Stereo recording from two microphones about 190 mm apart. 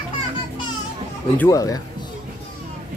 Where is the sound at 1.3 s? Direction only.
15° left (ahead or behind).